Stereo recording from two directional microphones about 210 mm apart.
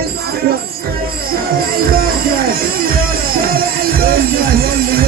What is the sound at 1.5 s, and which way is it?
Speech, 45° right (ahead or behind).